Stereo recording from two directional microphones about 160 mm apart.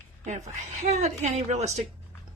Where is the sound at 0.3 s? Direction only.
45° right (ahead or behind).